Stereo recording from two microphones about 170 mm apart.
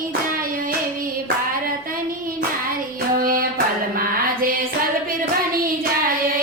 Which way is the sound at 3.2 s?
55° right (ahead or behind).